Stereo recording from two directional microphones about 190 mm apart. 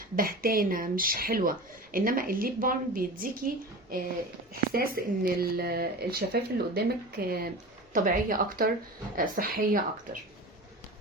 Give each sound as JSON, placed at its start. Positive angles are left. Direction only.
{"t": 0.0, "sound": "speech", "side_deg": -50}